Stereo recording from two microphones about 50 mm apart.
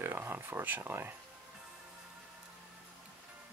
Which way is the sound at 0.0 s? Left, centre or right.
Right.